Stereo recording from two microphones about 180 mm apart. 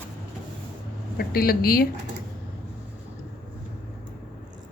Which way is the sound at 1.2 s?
55° left (ahead or behind).